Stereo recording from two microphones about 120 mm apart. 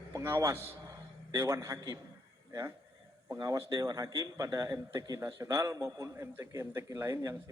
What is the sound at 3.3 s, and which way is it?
A man's voice, 25° right (ahead or behind).